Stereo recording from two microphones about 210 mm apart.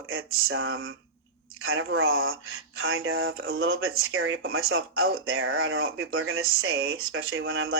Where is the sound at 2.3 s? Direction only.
75° right (ahead or behind).